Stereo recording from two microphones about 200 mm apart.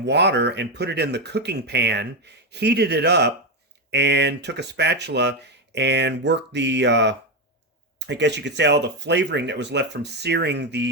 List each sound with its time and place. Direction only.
0.0 s speech: 60° right (ahead or behind)